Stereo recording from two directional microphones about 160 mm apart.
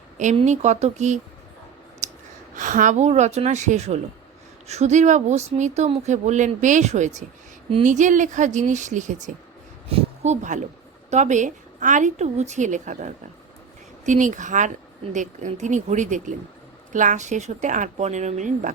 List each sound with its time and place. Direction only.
0.3 s speech: 45° right (ahead or behind)
2.0 s sigh: 45° right (ahead or behind)
2.6 s speech: 50° right (ahead or behind)